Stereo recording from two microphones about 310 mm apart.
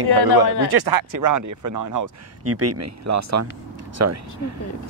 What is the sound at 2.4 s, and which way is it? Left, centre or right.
Speech, right.